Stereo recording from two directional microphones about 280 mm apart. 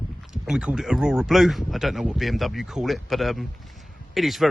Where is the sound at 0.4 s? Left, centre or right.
Centre.